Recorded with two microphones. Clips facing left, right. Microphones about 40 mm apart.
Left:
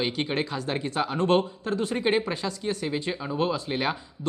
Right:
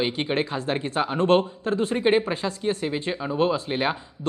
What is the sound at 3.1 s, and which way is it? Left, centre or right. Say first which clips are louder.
Speech: right 6 dB; centre.